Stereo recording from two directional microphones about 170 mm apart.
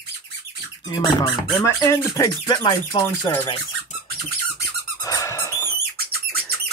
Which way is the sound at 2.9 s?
30° left (ahead or behind).